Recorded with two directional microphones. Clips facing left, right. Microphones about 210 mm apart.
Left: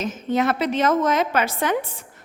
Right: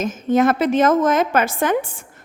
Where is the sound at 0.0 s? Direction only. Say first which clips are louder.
Right 5 dB; 45° right (ahead or behind).